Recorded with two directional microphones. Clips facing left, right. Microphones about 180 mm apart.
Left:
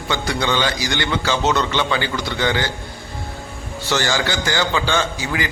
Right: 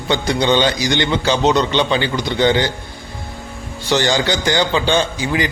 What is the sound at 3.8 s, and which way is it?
A man's voice, 20° right (ahead or behind).